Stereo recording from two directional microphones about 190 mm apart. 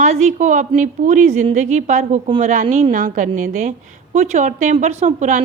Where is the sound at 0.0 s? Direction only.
35° right (ahead or behind).